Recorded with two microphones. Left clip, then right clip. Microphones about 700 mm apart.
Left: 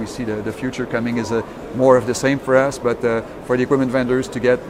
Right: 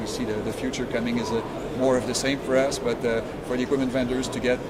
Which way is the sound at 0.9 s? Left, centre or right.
Left.